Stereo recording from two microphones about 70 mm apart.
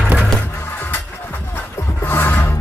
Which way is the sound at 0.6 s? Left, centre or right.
Left.